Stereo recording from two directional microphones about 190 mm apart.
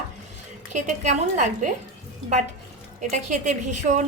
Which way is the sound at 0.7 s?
40° right (ahead or behind).